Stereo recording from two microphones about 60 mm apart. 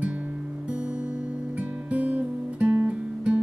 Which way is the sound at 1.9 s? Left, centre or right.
Right.